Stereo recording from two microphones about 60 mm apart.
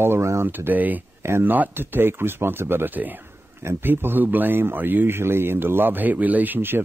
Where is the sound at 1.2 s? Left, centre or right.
Right.